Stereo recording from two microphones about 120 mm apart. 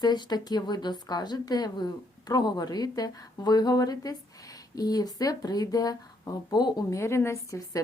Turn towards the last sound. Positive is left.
turn(degrees=25)  # may be behind; listen again after turning